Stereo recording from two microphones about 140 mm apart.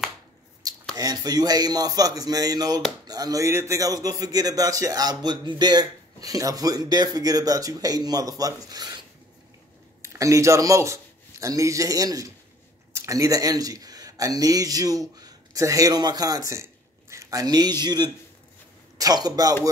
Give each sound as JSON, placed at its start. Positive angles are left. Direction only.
{"t": 0.9, "sound": "a man's voice", "side_deg": -25}
{"t": 10.0, "sound": "a man's voice", "side_deg": -20}